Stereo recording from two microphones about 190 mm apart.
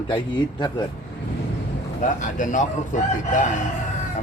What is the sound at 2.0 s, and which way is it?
Speech, 40° left (ahead or behind).